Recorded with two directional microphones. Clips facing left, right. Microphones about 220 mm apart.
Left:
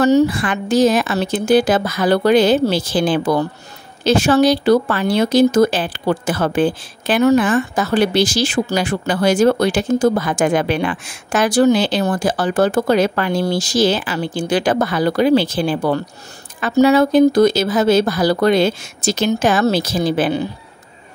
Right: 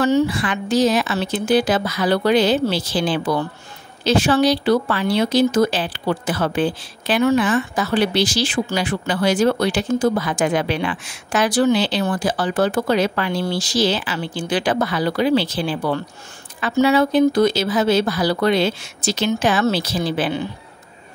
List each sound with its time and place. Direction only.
0.0 s speech: 40° left (ahead or behind)